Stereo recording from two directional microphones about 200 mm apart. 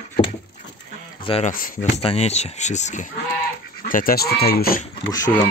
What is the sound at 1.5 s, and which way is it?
Speech, 45° left (ahead or behind).